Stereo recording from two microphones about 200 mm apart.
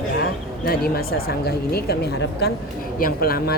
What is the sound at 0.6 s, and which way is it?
Speech, 50° left (ahead or behind).